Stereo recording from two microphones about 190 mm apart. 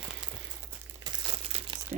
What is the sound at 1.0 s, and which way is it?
Crumpling, 25° right (ahead or behind).